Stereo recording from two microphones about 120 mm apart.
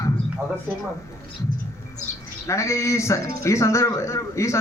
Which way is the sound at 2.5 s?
25° left (ahead or behind).